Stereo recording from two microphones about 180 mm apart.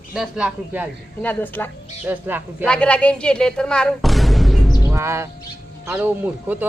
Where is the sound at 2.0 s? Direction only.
10° right (ahead or behind).